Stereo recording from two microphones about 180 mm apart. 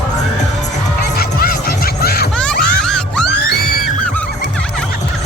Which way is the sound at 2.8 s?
5° left (ahead or behind).